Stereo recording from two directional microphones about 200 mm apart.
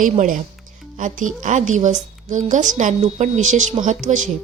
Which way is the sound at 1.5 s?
35° right (ahead or behind).